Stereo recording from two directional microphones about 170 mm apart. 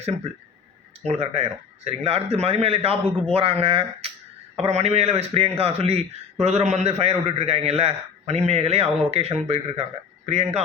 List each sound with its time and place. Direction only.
1.0 s a man's voice: 40° right (ahead or behind)